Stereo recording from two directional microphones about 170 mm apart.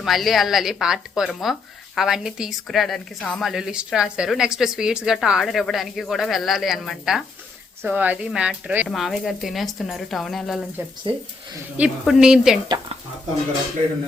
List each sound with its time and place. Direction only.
0.0 s a woman's voice: centre (ahead or behind)
11.1 s speech: 30° right (ahead or behind)
11.8 s a woman's voice: 5° right (ahead or behind)
12.6 s speech: 25° right (ahead or behind)